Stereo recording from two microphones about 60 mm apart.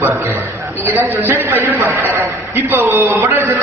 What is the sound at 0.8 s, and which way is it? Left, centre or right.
Speech, right.